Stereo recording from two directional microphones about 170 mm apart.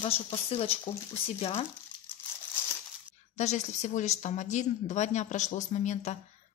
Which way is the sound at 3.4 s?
40° left (ahead or behind).